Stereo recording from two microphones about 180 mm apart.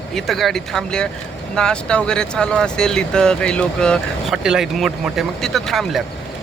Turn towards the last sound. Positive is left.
turn(degrees=0)  # may be behind; listen again after turning